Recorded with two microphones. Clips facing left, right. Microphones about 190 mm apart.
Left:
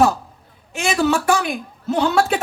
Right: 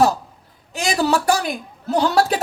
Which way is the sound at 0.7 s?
35° right (ahead or behind).